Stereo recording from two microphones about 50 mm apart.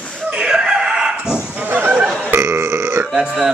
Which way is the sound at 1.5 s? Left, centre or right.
Right.